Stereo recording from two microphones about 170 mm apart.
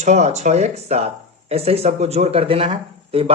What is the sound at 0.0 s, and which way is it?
Speech, 45° right (ahead or behind).